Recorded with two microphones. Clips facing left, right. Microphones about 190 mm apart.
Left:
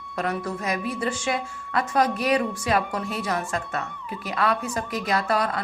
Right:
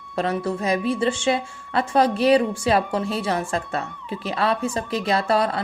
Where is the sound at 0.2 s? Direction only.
30° right (ahead or behind).